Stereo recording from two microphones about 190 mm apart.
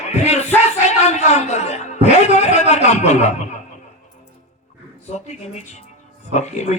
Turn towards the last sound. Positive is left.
turn(degrees=35)  # may be behind; listen again after turning